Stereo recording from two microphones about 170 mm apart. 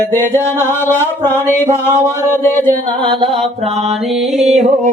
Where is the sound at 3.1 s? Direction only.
35° right (ahead or behind).